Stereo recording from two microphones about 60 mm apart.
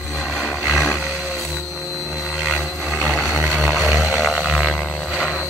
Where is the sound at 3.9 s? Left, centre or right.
Right.